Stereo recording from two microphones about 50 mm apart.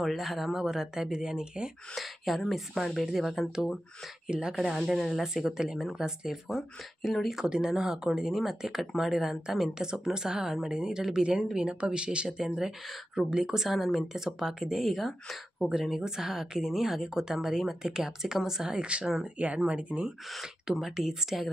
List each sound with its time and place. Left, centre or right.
0.1 s speech: centre
2.0 s speech: centre
4.3 s speech: centre
4.7 s speech: centre
6.5 s speech: centre
7.4 s speech: centre
13.7 s speech: centre
14.1 s speech: centre; by 20.1 s right
20.8 s speech: centre